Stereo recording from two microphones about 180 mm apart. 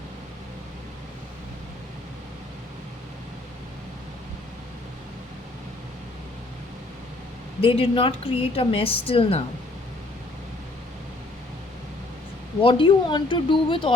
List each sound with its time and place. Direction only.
7.6 s a woman's voice: 30° left (ahead or behind)
12.6 s speech: 30° left (ahead or behind)